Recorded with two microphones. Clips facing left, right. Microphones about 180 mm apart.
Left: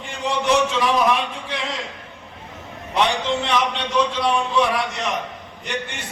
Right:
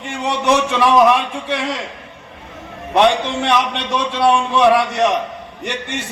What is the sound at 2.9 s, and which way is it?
A man's voice, 70° right (ahead or behind).